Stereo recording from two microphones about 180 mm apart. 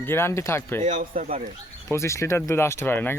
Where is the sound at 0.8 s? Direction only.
45° right (ahead or behind).